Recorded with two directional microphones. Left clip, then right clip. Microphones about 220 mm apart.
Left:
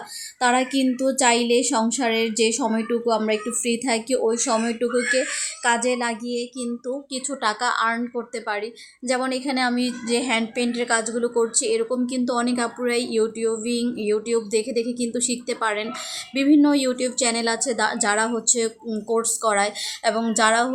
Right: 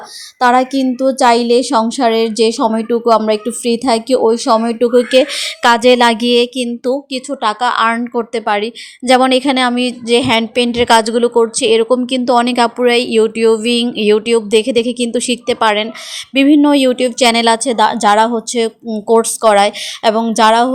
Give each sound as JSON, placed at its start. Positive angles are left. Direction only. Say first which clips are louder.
{"t": 0.3, "sound": "a woman's voice", "louder": "right 9 dB", "side_deg": -25}